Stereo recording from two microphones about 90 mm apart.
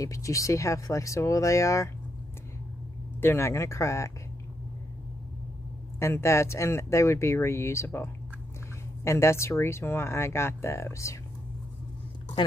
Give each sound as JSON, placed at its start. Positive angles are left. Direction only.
{"t": 0.0, "sound": "speech", "side_deg": 35}
{"t": 3.2, "sound": "speech", "side_deg": 25}
{"t": 5.9, "sound": "speech", "side_deg": 30}